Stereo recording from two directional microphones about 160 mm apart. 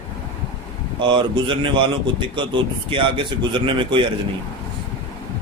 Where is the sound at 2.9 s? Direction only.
30° right (ahead or behind).